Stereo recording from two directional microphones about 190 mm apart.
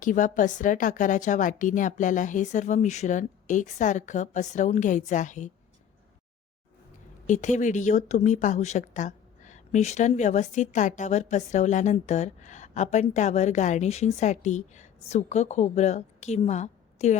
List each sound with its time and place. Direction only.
0.0 s speech: 40° left (ahead or behind)
7.3 s speech: 40° left (ahead or behind)